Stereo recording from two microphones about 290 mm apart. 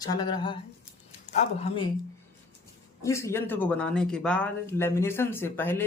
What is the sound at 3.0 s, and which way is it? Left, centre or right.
Speech, centre.